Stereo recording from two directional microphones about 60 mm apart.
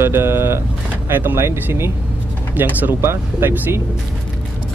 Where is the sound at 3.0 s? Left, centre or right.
Right.